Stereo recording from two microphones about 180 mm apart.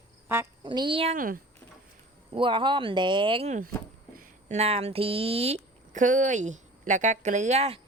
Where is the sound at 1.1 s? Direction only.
50° right (ahead or behind).